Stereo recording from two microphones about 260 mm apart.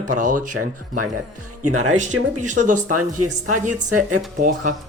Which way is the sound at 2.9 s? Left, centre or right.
Right.